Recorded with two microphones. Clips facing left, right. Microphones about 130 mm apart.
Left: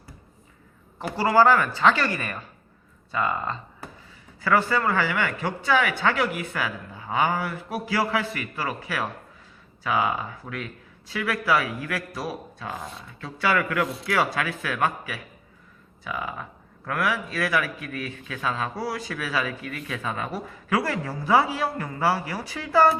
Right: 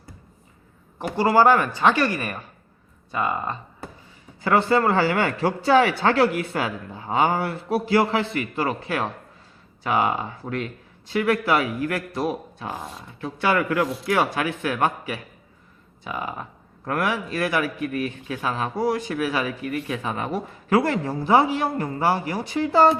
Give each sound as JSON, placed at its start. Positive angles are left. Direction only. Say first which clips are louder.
{"t": 0.9, "sound": "a man's voice", "louder": "right 1 dB", "side_deg": -20}